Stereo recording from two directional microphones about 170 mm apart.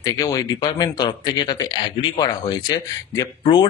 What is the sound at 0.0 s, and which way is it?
Speech, 20° left (ahead or behind).